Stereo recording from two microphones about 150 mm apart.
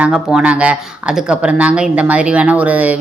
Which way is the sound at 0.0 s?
5° right (ahead or behind).